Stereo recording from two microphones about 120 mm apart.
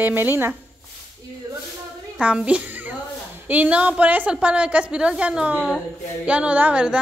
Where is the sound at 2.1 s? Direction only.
10° right (ahead or behind).